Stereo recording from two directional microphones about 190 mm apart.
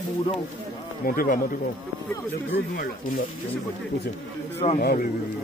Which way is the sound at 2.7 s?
45° left (ahead or behind).